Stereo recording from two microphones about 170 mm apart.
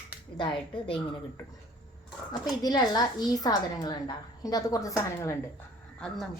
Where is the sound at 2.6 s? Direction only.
25° left (ahead or behind).